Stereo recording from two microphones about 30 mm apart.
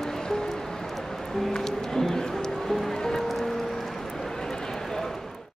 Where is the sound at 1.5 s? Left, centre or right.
Centre.